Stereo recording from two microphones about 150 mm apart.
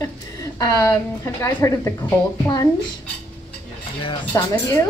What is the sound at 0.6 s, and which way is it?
Speech, 20° left (ahead or behind).